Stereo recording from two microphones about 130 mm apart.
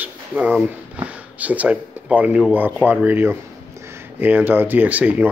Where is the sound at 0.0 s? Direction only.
10° right (ahead or behind).